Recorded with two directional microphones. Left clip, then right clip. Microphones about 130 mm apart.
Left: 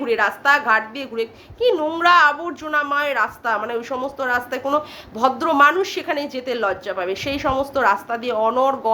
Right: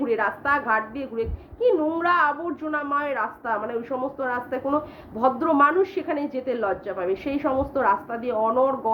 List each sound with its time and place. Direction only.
0.0 s a woman's voice: 20° left (ahead or behind)